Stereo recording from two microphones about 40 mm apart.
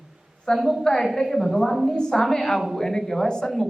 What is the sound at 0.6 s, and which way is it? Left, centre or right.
Speech, centre.